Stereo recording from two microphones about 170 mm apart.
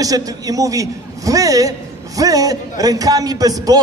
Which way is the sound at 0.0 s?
20° right (ahead or behind).